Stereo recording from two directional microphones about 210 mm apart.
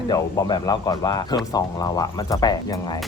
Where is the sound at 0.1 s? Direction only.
20° left (ahead or behind).